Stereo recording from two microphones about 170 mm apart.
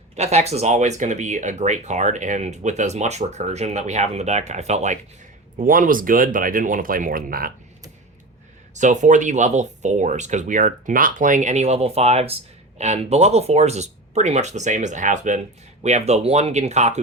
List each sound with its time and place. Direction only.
0.2 s speech: 40° right (ahead or behind); by 7.5 s 60° right (ahead or behind)
8.7 s speech: 45° right (ahead or behind)